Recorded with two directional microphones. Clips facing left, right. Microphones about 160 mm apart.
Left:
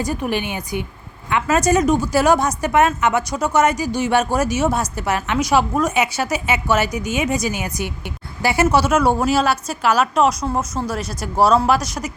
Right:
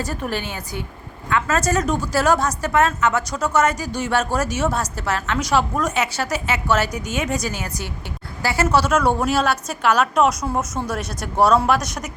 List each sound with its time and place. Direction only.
0.0 s a woman's voice: 15° left (ahead or behind)